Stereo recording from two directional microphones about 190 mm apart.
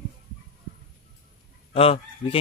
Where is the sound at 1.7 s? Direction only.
30° left (ahead or behind).